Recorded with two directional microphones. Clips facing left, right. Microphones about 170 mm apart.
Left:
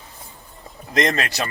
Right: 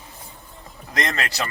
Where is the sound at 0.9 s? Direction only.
20° left (ahead or behind).